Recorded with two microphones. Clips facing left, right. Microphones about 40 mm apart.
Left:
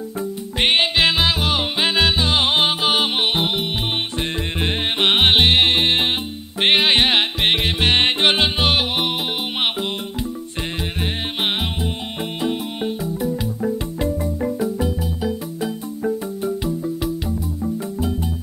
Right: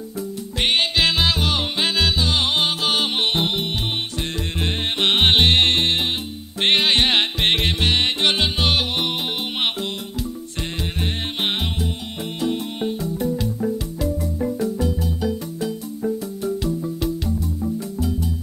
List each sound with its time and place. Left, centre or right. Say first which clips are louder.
0.6 s music: left 2 dB; left
5.9 s music: left 3 dB; left
6.6 s music: left 2 dB; centre
7.8 s music: left 6 dB; left
11.0 s music: left 1 dB; centre
13.0 s music: even; centre
14.6 s music: left 1 dB; centre